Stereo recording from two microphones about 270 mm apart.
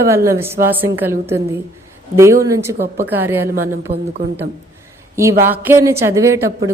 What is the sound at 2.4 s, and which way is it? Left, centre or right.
A woman's voice, centre.